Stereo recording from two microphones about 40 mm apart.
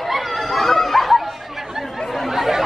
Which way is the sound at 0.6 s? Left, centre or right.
Centre.